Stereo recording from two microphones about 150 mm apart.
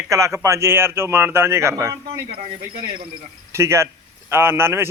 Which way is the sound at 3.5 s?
20° right (ahead or behind).